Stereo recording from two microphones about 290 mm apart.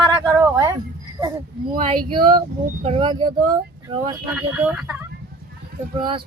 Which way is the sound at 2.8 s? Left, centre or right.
Centre.